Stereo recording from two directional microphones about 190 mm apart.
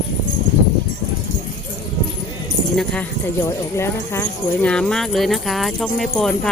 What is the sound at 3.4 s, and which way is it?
Speech, 15° left (ahead or behind).